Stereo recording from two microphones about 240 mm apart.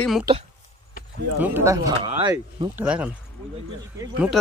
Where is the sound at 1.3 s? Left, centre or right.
Centre.